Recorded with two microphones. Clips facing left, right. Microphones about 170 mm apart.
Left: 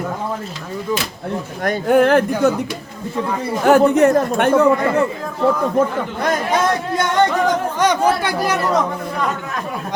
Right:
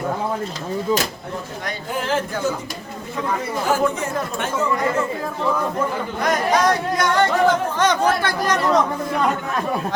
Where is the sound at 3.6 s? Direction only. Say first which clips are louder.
Left 11 dB; 65° left (ahead or behind).